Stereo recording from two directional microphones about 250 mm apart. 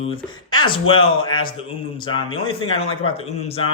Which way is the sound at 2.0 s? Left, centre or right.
Centre.